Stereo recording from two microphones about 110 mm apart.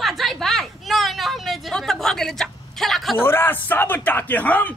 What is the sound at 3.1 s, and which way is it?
A man's voice, 20° left (ahead or behind).